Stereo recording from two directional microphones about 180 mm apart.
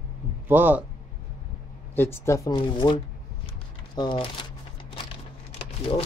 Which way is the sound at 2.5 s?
25° left (ahead or behind).